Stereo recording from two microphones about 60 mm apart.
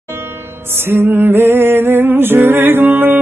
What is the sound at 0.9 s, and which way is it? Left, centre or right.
Music, right.